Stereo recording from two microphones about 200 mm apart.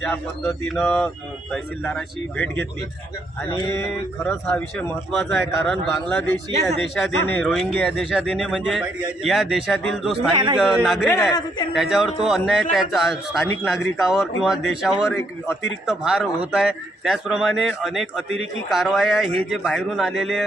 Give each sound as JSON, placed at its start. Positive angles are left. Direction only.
{"t": 0.0, "sound": "speech", "side_deg": 0}
{"t": 10.3, "sound": "a man's voice", "side_deg": -25}
{"t": 10.6, "sound": "speech", "side_deg": -5}
{"t": 11.1, "sound": "speech", "side_deg": 15}
{"t": 11.7, "sound": "speech", "side_deg": 0}